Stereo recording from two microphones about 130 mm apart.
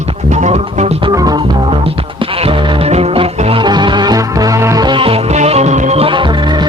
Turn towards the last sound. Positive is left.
turn(degrees=-45)  # may be behind; listen again after turning